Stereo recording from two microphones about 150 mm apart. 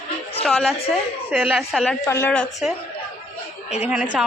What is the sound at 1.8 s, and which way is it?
Speech, 10° left (ahead or behind).